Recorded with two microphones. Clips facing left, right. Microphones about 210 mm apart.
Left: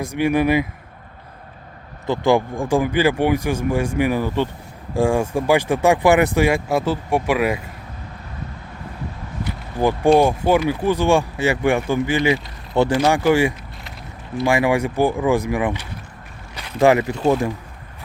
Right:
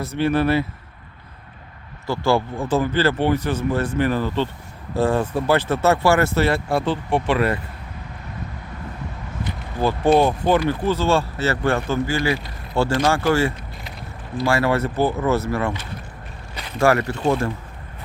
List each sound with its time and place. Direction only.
0.0 s speech: 15° left (ahead or behind)
2.0 s speech: 15° left (ahead or behind)
10.2 s speech: 10° left (ahead or behind)